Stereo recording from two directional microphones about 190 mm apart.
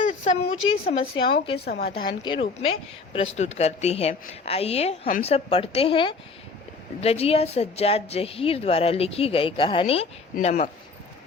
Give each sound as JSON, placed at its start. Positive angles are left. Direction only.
{"t": 0.0, "sound": "a sound", "side_deg": 35}
{"t": 1.2, "sound": "a woman's voice", "side_deg": 25}
{"t": 1.6, "sound": "a woman's voice", "side_deg": 55}
{"t": 1.9, "sound": "a woman's voice", "side_deg": 25}
{"t": 10.3, "sound": "a woman's voice", "side_deg": 40}